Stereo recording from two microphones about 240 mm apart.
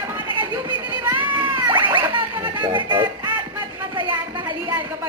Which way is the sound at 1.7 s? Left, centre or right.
Centre.